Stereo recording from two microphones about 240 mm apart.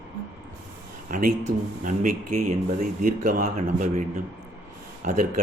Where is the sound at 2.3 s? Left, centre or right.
Right.